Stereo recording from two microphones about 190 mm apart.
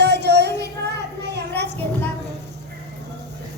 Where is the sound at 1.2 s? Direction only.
60° right (ahead or behind).